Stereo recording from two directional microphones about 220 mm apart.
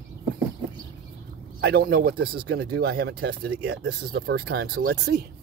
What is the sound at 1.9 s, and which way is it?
Speech, 45° right (ahead or behind).